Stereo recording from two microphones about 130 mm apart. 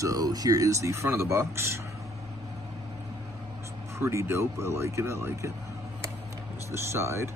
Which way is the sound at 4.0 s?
20° right (ahead or behind).